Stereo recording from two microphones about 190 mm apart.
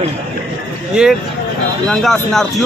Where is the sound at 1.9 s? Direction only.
Centre (ahead or behind).